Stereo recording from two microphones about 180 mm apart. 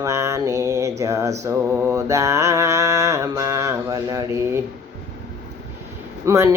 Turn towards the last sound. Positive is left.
turn(degrees=-15)  # may be behind; listen again after turning